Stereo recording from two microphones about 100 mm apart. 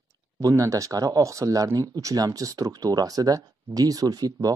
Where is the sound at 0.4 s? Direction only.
35° right (ahead or behind).